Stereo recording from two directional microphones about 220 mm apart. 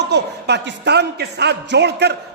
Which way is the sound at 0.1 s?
50° right (ahead or behind).